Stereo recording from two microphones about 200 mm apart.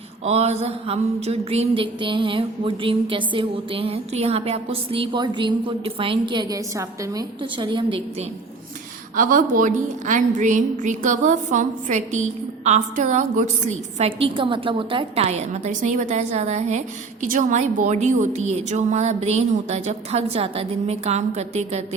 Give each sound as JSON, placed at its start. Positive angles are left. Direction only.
{"t": 0.3, "sound": "mantra", "side_deg": -35}
{"t": 9.1, "sound": "a woman's voice", "side_deg": -40}